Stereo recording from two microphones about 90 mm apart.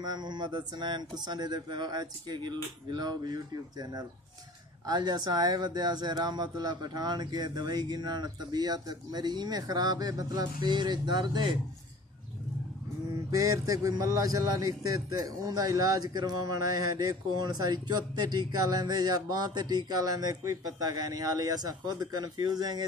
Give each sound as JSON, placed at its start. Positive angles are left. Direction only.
{"t": 0.0, "sound": "a man's voice", "side_deg": -50}
{"t": 13.3, "sound": "a man's voice", "side_deg": -40}